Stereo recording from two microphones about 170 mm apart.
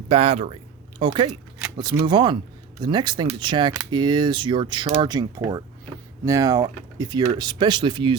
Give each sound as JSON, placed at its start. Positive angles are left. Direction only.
{"t": 0.1, "sound": "speech", "side_deg": -35}